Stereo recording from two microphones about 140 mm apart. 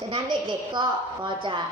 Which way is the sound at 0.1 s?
35° right (ahead or behind).